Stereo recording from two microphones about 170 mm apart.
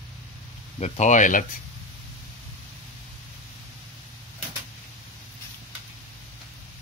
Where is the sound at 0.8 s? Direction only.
45° left (ahead or behind).